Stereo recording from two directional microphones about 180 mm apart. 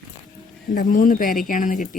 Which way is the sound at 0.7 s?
50° left (ahead or behind).